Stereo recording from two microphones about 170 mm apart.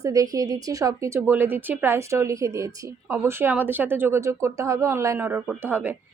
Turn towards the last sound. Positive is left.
turn(degrees=-10)  # may be behind; listen again after turning